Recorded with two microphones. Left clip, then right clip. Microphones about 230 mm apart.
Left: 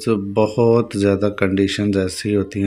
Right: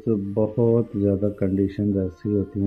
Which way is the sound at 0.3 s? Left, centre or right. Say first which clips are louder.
Left 6 dB; left.